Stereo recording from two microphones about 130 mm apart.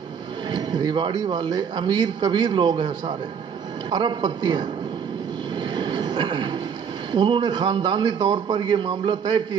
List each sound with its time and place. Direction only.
0.5 s speech: 35° right (ahead or behind)
5.8 s train: 35° right (ahead or behind)
7.1 s speech: 35° right (ahead or behind)